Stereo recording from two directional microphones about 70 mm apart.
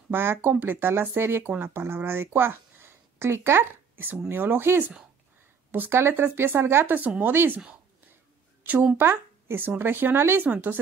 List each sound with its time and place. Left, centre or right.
0.1 s speech: right
8.9 s speech: right